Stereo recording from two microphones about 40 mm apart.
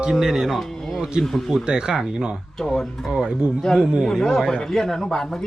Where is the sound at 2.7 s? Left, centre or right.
Centre.